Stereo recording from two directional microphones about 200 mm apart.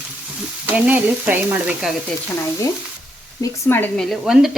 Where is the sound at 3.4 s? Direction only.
15° left (ahead or behind).